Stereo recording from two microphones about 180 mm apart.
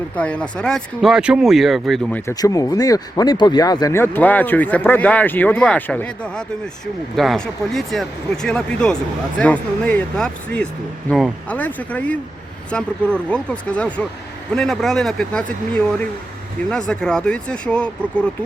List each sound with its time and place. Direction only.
0.2 s speech: 5° left (ahead or behind)
2.3 s speech: 20° left (ahead or behind)
16.6 s speech: 5° left (ahead or behind)